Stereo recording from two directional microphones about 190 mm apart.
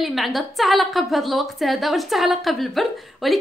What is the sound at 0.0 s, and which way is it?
A woman's voice, centre (ahead or behind).